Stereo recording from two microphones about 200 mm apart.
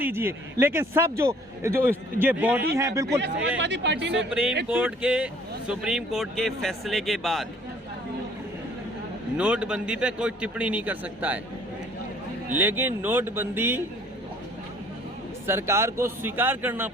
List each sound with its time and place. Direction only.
0.0 s a man's voice: 10° right (ahead or behind)
3.6 s speech: 60° right (ahead or behind)
4.3 s a man's voice: 5° right (ahead or behind)
9.4 s speech: 5° right (ahead or behind)
12.5 s a man's voice: 10° right (ahead or behind)
15.4 s a man's voice: 10° right (ahead or behind)